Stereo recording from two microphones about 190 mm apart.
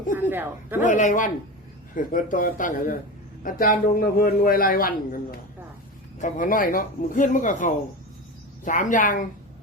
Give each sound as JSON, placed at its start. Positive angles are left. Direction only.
{"t": 0.3, "sound": "a woman's voice", "side_deg": -10}
{"t": 0.8, "sound": "speech", "side_deg": 40}